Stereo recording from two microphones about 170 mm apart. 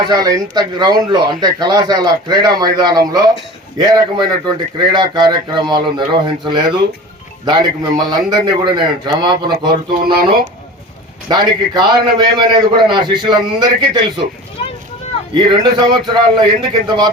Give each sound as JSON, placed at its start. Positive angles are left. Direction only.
{"t": 0.0, "sound": "speech", "side_deg": -25}
{"t": 11.3, "sound": "speech", "side_deg": -25}
{"t": 15.4, "sound": "speech", "side_deg": -25}